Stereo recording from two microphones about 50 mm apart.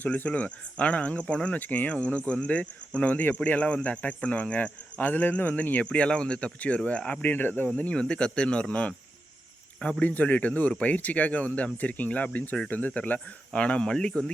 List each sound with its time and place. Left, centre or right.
0.3 s cricket: left
1.5 s cricket: left
7.2 s speech: left
7.7 s cricket: left
10.0 s speech: left
12.5 s cricket: left
13.1 s speech: centre